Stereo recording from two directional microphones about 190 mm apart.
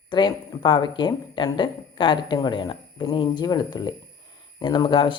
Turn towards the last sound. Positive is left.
turn(degrees=25)  # may be behind; listen again after turning